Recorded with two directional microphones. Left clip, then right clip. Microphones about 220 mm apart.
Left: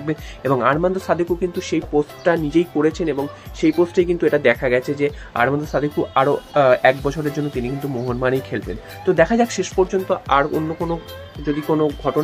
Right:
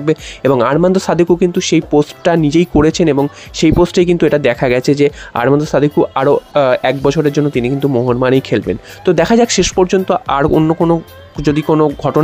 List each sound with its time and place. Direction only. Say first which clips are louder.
0.0 s speech: right 10 dB; 45° right (ahead or behind)